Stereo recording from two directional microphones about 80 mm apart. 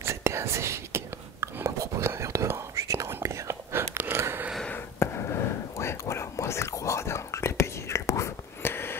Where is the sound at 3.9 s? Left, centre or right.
Right.